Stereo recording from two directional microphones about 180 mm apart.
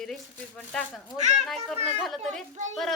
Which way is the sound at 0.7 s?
Centre (ahead or behind).